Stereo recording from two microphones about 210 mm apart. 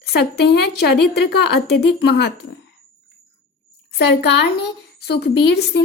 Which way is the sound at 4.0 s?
55° left (ahead or behind).